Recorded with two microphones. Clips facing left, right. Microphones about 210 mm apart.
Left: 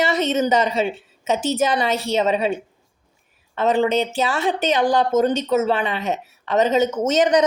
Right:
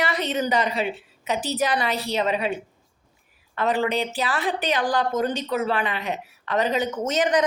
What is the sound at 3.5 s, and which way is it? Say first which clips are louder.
Speech: left 5 dB; 25° left (ahead or behind).